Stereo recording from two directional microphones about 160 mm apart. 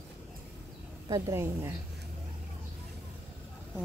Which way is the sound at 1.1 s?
20° right (ahead or behind).